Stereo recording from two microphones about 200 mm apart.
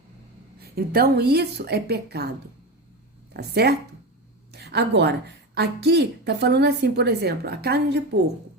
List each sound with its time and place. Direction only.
0.6 s a woman's voice: 50° right (ahead or behind)
3.3 s a woman's voice: 55° right (ahead or behind)